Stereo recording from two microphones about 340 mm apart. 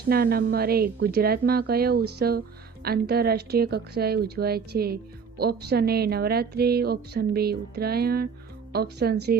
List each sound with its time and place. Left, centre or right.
0.0 s a woman's voice: right